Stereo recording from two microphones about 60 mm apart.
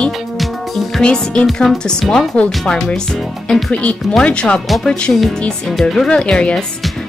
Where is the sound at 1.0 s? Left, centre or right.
Centre.